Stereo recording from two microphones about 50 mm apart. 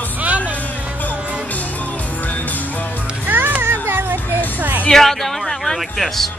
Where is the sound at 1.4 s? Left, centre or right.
Left.